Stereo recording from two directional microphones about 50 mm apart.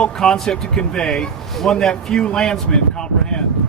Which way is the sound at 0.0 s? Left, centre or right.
Centre.